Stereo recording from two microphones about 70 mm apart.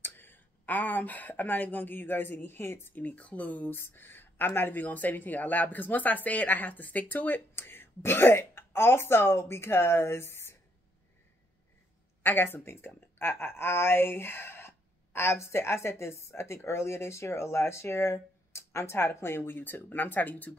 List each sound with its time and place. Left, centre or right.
0.0 s speech: left
3.7 s speech: left
12.2 s speech: left